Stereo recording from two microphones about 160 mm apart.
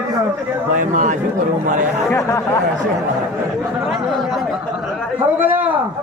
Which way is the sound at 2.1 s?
20° left (ahead or behind).